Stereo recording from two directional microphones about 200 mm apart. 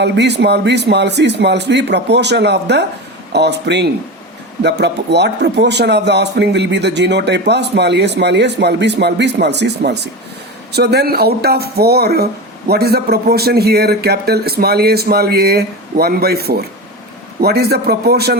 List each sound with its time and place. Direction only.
0.0 s speech: 60° right (ahead or behind)